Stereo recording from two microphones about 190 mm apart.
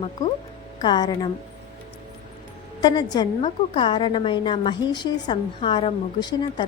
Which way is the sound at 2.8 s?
20° left (ahead or behind).